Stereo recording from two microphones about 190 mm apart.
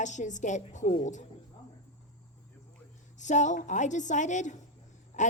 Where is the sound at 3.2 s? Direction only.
40° left (ahead or behind).